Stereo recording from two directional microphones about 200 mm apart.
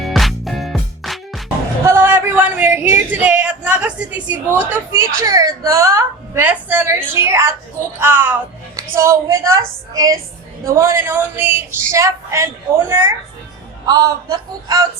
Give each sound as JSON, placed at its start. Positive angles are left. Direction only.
{"t": 0.0, "sound": "music", "side_deg": 0}
{"t": 1.8, "sound": "a woman's voice", "side_deg": -10}